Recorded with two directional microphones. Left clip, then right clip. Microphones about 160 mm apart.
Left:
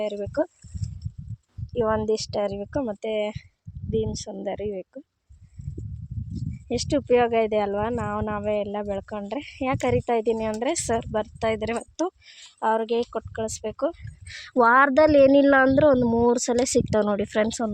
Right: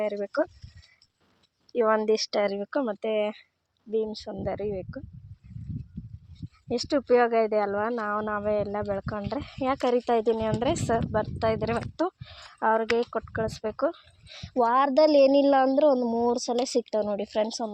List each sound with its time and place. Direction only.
0.0 s speech: 25° left (ahead or behind)
1.7 s speech: 15° left (ahead or behind)
4.1 s speech: 35° left (ahead or behind)
6.7 s speech: 25° left (ahead or behind)
14.3 s speech: 50° left (ahead or behind)